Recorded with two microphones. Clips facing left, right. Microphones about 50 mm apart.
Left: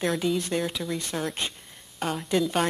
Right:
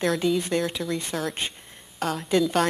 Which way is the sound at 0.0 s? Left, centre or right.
Centre.